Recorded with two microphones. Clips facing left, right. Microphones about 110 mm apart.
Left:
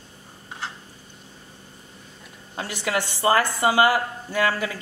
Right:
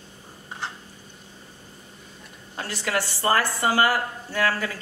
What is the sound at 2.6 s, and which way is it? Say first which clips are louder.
A woman's voice: left 1 dB; 15° left (ahead or behind).